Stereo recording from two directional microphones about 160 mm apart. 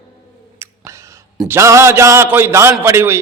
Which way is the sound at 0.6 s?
20° right (ahead or behind).